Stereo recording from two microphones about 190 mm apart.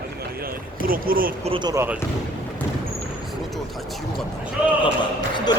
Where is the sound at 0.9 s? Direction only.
50° right (ahead or behind).